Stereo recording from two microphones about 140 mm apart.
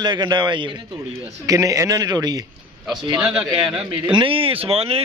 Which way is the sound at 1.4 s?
25° right (ahead or behind).